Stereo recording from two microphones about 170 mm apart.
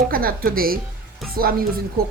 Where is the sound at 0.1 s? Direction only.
60° right (ahead or behind).